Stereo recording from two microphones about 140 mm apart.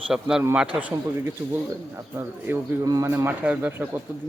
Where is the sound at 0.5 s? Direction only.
5° right (ahead or behind).